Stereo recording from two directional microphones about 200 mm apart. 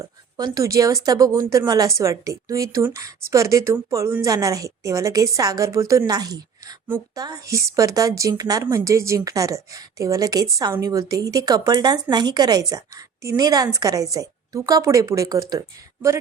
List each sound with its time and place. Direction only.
0.0 s a woman's voice: 20° right (ahead or behind)